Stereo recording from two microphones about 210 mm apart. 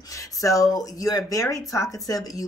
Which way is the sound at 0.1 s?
15° left (ahead or behind).